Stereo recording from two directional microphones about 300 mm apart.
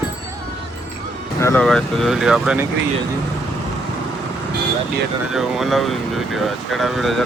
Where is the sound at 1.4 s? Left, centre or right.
Centre.